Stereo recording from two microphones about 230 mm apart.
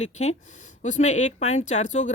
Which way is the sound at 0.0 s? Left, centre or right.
Left.